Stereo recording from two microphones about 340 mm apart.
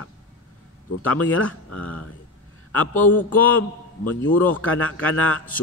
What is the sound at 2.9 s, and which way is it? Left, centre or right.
A man's voice, centre.